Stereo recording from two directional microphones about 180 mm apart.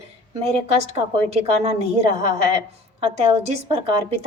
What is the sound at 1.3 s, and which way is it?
Speech, 35° right (ahead or behind).